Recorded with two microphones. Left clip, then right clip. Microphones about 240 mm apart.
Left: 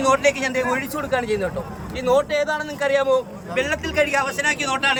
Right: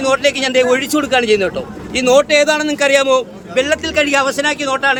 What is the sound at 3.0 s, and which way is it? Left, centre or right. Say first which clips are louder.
A man's voice: right 6 dB; right.